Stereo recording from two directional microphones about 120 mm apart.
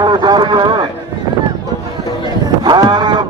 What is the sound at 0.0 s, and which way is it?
Speech, 35° right (ahead or behind).